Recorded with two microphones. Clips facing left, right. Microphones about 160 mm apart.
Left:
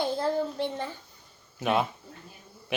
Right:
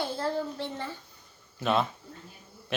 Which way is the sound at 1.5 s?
15° left (ahead or behind).